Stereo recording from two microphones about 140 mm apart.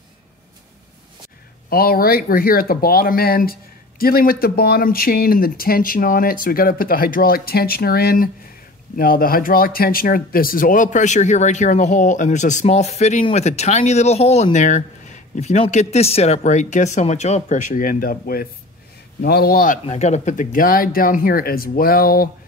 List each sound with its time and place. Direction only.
1.7 s speech: 90° left
19.9 s speech: 55° left (ahead or behind); by 22.3 s 90° left